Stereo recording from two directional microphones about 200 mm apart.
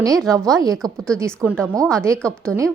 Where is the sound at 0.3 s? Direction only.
15° right (ahead or behind).